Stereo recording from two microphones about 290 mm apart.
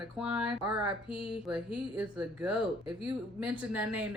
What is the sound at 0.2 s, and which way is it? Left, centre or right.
Speech, centre.